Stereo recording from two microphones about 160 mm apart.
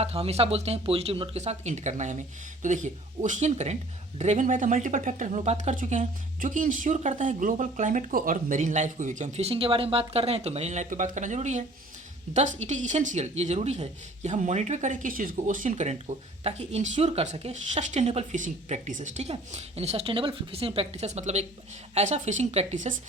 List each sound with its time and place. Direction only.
0.0 s speech: 40° right (ahead or behind)